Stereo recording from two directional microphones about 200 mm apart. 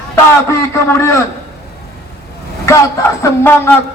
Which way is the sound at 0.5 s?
15° left (ahead or behind).